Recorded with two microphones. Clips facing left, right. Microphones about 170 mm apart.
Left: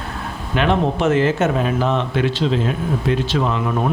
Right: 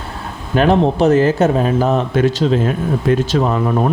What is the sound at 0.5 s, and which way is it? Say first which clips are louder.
Speech: right 5 dB; 40° right (ahead or behind).